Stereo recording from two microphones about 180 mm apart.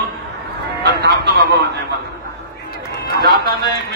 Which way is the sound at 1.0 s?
65° right (ahead or behind).